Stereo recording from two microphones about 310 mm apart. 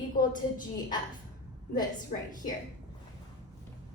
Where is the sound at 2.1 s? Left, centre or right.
Left.